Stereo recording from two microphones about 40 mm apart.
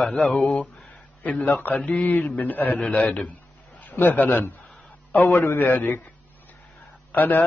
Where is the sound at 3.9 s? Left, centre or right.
Left.